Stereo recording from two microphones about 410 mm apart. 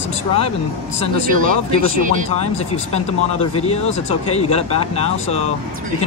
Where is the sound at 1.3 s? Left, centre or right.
Centre.